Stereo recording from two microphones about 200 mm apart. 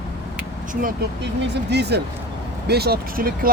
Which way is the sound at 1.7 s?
55° right (ahead or behind).